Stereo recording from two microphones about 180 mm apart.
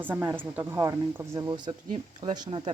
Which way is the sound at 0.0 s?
10° right (ahead or behind).